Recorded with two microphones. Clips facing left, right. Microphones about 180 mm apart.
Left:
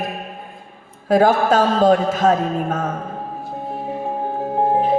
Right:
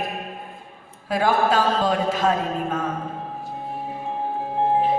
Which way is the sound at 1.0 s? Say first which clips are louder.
Left 6 dB; 45° left (ahead or behind).